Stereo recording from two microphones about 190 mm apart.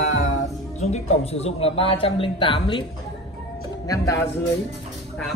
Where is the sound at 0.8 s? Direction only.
35° left (ahead or behind).